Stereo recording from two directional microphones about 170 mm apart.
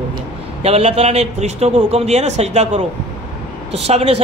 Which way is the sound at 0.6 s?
35° right (ahead or behind).